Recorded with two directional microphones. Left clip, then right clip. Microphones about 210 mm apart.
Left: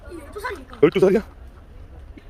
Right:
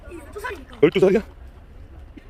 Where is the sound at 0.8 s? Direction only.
Centre (ahead or behind).